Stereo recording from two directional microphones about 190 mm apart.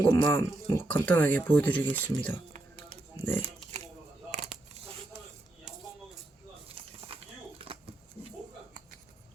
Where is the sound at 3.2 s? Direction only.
30° right (ahead or behind).